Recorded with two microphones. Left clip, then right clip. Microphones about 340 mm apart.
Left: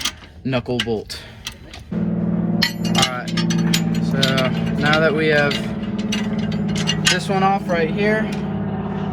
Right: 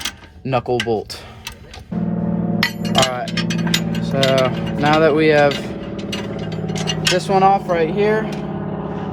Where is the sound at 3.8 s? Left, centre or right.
Right.